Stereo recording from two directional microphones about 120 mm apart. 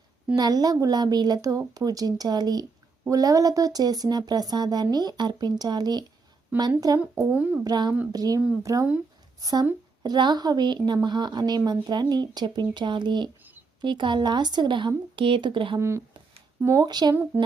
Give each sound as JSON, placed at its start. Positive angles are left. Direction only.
{"t": 0.3, "sound": "a woman's voice", "side_deg": -35}
{"t": 7.0, "sound": "speech", "side_deg": -10}
{"t": 7.6, "sound": "a woman's voice", "side_deg": -35}
{"t": 15.8, "sound": "speech", "side_deg": -25}
{"t": 16.8, "sound": "a woman's voice", "side_deg": -35}